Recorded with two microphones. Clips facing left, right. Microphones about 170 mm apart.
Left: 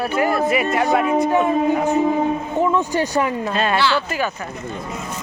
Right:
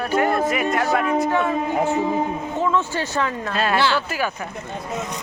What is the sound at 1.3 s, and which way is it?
Speech, 15° left (ahead or behind).